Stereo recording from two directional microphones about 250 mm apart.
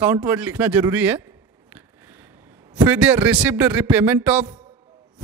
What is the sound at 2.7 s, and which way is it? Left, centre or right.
A man's voice, centre.